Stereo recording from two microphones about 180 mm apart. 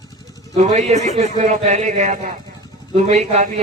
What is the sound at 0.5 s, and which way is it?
A man's voice, 40° right (ahead or behind).